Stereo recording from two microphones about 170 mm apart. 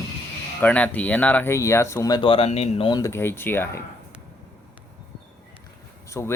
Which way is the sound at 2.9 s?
20° left (ahead or behind).